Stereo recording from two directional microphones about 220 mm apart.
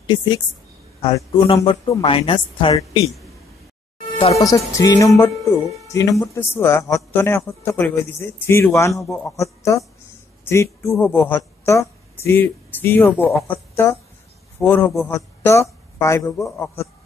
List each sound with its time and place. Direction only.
0.0 s a woman's voice: 20° left (ahead or behind)
4.4 s a woman's voice: 15° left (ahead or behind)